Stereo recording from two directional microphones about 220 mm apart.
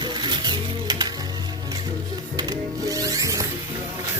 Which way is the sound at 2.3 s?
15° right (ahead or behind).